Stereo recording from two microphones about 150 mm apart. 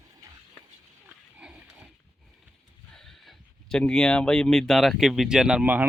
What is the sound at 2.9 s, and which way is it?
Speech, 5° left (ahead or behind).